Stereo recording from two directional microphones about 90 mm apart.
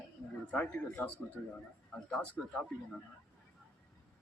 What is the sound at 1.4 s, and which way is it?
A man's voice, 20° left (ahead or behind).